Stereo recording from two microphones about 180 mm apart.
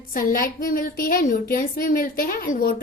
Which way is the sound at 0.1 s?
50° left (ahead or behind).